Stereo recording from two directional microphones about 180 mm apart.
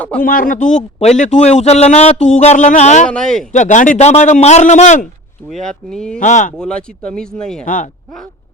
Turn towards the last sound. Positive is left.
turn(degrees=5)  # may be behind; listen again after turning